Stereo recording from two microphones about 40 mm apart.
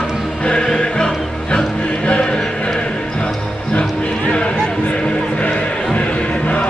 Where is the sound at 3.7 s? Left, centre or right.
Left.